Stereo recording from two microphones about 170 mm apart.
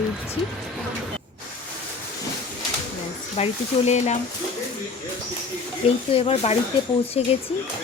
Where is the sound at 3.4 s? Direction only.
40° left (ahead or behind).